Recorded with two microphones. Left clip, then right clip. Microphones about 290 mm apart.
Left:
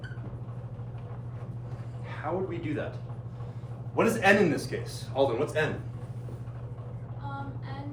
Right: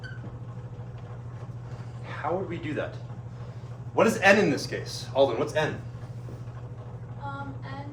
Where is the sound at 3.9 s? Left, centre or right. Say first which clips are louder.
Right 3 dB; right.